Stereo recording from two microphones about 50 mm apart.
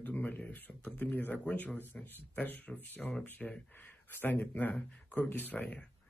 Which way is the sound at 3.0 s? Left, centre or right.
Centre.